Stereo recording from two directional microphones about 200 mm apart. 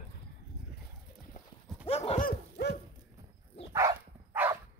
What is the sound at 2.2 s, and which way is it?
Dog, 50° left (ahead or behind).